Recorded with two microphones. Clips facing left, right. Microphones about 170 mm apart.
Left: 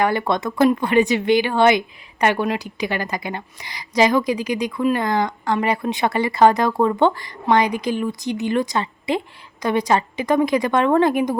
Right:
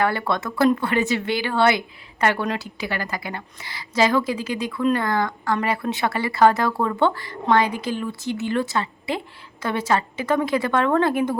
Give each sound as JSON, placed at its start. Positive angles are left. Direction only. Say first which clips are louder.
{"t": 0.0, "sound": "a woman's voice", "louder": "left 3 dB", "side_deg": 15}